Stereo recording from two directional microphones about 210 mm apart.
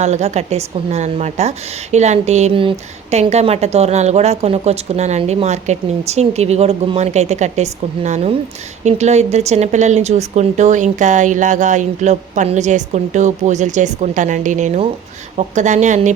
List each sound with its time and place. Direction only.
0.0 s a woman's voice: 30° right (ahead or behind)